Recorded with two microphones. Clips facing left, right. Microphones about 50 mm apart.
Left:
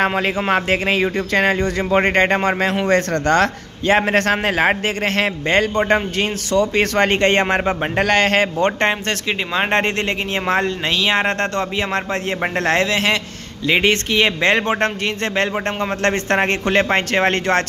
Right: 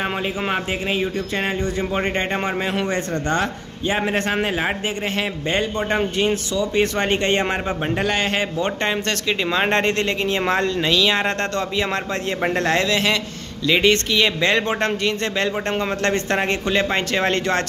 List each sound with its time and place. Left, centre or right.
0.5 s a man's voice: left
8.0 s a man's voice: left
9.5 s speech: left